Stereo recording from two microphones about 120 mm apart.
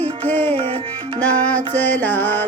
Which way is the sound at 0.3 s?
15° left (ahead or behind).